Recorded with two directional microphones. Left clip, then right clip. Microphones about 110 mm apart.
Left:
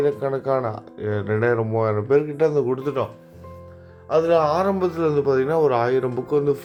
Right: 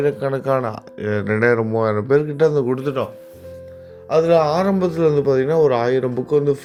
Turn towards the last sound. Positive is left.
turn(degrees=-15)  # may be behind; listen again after turning